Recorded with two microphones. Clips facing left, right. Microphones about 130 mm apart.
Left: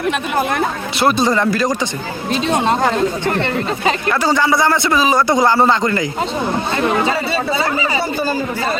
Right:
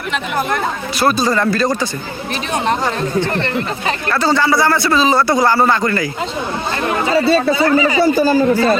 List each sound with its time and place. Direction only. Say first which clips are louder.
0.9 s speech: left 1 dB; 20° left (ahead or behind)
3.3 s speech: left 1 dB; 15° left (ahead or behind)